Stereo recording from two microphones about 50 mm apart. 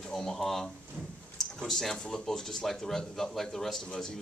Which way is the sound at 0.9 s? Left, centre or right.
Right.